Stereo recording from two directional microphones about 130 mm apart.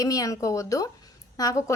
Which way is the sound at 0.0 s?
25° left (ahead or behind).